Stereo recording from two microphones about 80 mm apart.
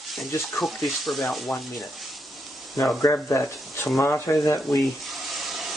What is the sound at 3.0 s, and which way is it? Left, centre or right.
Speech, left.